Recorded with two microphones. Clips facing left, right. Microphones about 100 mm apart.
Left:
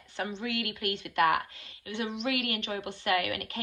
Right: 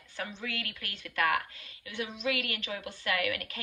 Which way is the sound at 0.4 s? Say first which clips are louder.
Left 7 dB; 25° left (ahead or behind).